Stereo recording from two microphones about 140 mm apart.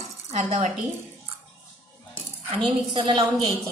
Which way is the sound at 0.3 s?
55° right (ahead or behind).